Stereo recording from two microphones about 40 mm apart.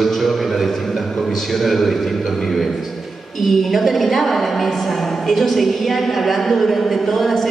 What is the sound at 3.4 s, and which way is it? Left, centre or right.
A woman's voice, centre.